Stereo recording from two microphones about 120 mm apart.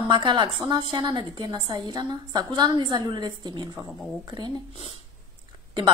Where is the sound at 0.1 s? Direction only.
40° right (ahead or behind).